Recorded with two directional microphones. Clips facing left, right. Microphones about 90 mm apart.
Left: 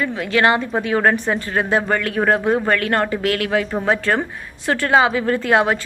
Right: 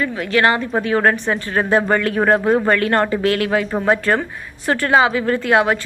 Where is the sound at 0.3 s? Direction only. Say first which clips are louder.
Even; 15° left (ahead or behind).